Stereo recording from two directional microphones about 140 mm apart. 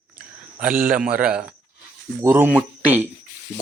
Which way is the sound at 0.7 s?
85° right.